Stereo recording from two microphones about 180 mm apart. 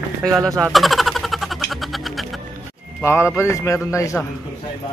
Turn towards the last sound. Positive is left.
turn(degrees=15)  # may be behind; listen again after turning